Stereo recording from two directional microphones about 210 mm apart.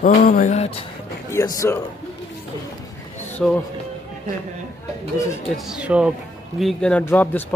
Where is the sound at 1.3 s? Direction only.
15° left (ahead or behind).